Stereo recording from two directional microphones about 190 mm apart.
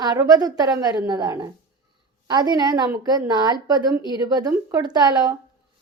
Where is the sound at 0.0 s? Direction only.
20° right (ahead or behind).